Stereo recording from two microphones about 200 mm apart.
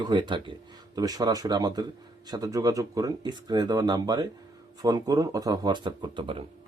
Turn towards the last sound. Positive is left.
turn(degrees=-25)  # may be behind; listen again after turning